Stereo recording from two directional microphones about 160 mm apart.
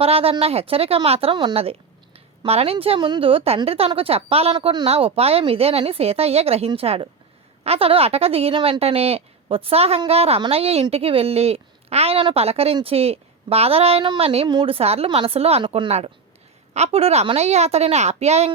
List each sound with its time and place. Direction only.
0.0 s a woman's voice: 40° right (ahead or behind)